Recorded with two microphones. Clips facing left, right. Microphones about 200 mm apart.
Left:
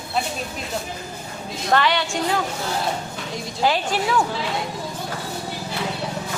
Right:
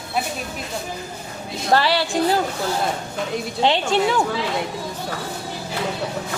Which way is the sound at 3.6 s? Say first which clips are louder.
Right 3 dB; 25° right (ahead or behind).